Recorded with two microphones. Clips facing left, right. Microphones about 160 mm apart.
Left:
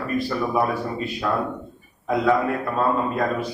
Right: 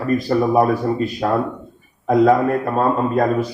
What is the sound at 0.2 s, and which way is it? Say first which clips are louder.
A man's voice: right 5 dB; 40° right (ahead or behind).